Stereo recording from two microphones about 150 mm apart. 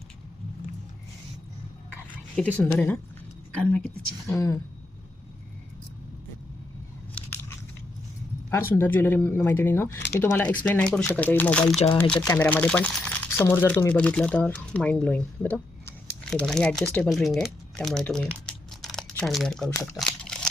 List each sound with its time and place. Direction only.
2.1 s speech: 10° left (ahead or behind)
4.4 s speech: 20° left (ahead or behind)
8.7 s speech: 15° left (ahead or behind)